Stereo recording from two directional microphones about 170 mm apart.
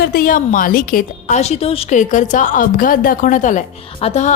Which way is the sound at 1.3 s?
40° left (ahead or behind).